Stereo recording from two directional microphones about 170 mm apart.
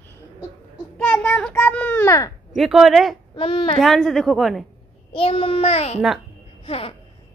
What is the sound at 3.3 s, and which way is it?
Speech, 35° left (ahead or behind).